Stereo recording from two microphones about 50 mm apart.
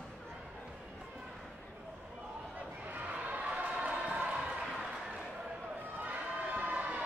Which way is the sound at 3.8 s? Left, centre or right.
Right.